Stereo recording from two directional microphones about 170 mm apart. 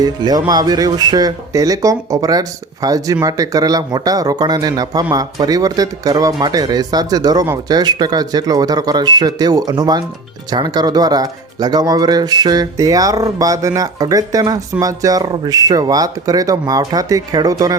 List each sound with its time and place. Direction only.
0.0 s speech: 25° right (ahead or behind)